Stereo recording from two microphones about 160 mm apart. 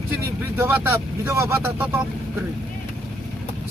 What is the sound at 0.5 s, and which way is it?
Speech, 15° right (ahead or behind).